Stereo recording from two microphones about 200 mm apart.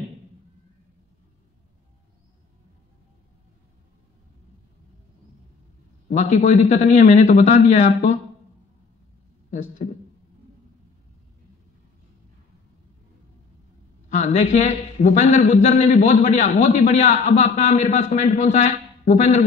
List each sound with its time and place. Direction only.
6.0 s a man's voice: 35° left (ahead or behind)
9.8 s a man's voice: 35° left (ahead or behind)
14.1 s a man's voice: 35° left (ahead or behind)